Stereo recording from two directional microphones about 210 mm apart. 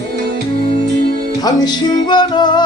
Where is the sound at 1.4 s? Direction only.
20° left (ahead or behind).